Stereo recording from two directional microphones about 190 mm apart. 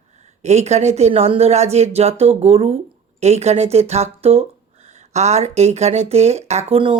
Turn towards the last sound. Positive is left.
turn(degrees=-30)  # may be behind; listen again after turning